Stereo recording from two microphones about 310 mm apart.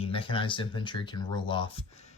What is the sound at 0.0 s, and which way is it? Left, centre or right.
Speech, centre.